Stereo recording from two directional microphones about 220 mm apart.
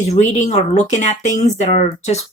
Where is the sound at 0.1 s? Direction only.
30° left (ahead or behind).